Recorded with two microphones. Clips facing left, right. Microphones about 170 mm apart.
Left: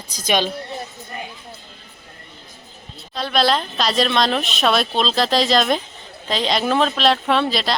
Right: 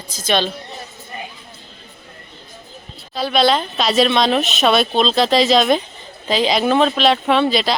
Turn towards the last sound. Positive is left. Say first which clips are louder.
# right 3 dB
turn(degrees=0)  # may be behind; listen again after turning